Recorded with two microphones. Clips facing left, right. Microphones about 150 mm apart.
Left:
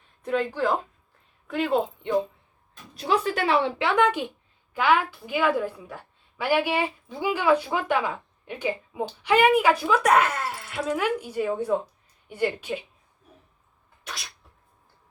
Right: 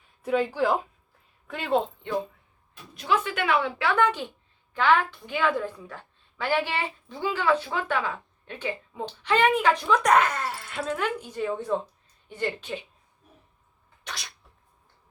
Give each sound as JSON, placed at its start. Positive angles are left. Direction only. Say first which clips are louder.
{"t": 0.2, "sound": "speech", "louder": "right 1 dB", "side_deg": -5}
{"t": 2.9, "sound": "speech", "louder": "left 2 dB", "side_deg": 35}
{"t": 3.8, "sound": "a woman's voice", "louder": "left 2 dB", "side_deg": 15}
{"t": 14.0, "sound": "sneeze", "louder": "even", "side_deg": 0}